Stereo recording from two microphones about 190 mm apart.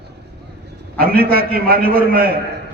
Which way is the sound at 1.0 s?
50° right (ahead or behind).